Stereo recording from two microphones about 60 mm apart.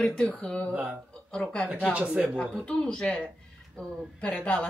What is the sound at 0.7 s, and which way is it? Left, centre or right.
Speech, right.